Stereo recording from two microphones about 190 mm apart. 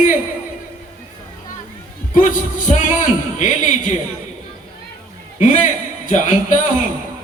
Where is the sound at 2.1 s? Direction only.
45° left (ahead or behind).